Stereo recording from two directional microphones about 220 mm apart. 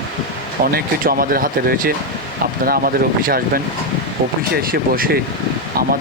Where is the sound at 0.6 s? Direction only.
40° right (ahead or behind).